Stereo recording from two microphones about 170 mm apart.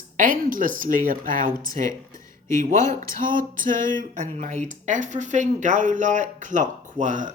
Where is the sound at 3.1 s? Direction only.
55° right (ahead or behind).